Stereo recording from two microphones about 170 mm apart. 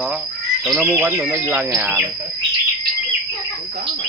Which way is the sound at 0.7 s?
Centre (ahead or behind).